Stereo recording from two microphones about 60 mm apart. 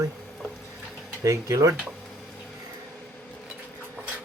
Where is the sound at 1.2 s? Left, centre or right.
Right.